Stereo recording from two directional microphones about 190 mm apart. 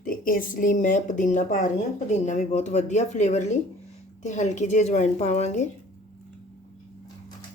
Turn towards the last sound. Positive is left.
turn(degrees=35)  # may be behind; listen again after turning